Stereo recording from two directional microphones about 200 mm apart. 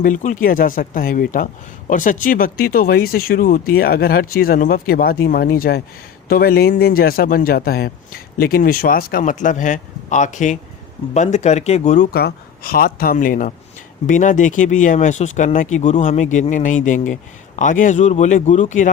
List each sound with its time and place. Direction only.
0.0 s speech: 40° left (ahead or behind)
12.1 s speech: 50° left (ahead or behind)